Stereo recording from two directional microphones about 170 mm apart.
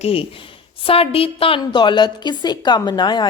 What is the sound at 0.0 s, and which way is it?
Speech, 35° left (ahead or behind).